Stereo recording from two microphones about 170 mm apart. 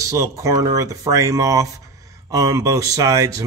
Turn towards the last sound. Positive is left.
turn(degrees=-20)  # may be behind; listen again after turning